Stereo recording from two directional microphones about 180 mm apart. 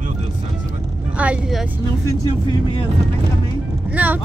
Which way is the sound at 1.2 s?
5° right (ahead or behind).